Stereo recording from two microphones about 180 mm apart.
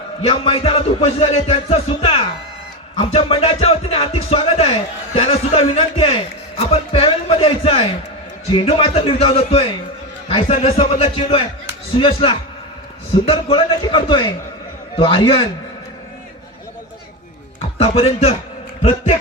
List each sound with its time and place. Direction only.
0.2 s music: 30° left (ahead or behind)
11.9 s a man's voice: 30° left (ahead or behind)
17.7 s music: 35° left (ahead or behind)